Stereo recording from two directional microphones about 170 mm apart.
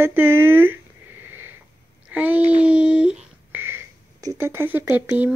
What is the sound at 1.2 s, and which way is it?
Wheeze, 10° right (ahead or behind).